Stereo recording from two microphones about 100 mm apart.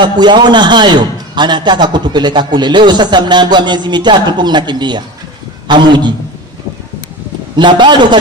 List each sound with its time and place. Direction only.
0.0 s a man's voice: 50° right (ahead or behind)
7.5 s a man's voice: 50° right (ahead or behind)